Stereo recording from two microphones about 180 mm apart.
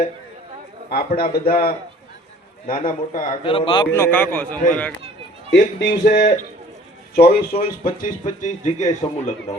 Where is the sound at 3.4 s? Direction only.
30° left (ahead or behind).